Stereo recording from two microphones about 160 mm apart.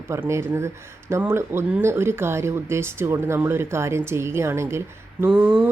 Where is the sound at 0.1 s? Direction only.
15° right (ahead or behind).